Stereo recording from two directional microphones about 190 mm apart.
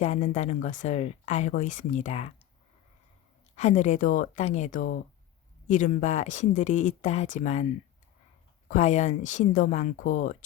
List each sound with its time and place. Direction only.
0.0 s speech: 35° left (ahead or behind)
3.5 s speech: 35° left (ahead or behind)